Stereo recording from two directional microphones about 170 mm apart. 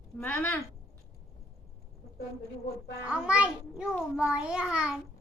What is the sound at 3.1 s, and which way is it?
A child's voice, 5° right (ahead or behind).